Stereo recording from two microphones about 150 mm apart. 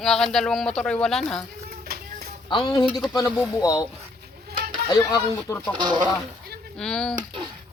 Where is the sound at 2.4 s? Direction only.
30° left (ahead or behind).